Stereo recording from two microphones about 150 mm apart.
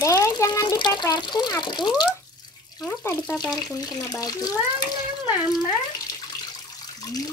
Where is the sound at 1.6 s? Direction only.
30° left (ahead or behind).